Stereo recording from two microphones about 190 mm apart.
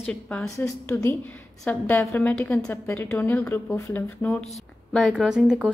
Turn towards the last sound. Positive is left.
turn(degrees=-5)  # may be behind; listen again after turning